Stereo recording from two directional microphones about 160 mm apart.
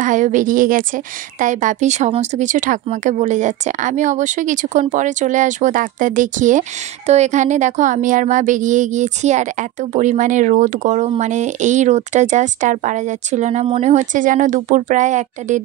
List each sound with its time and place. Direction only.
0.0 s a woman's voice: 50° right (ahead or behind)